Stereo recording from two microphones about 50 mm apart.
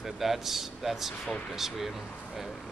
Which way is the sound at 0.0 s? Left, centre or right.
Centre.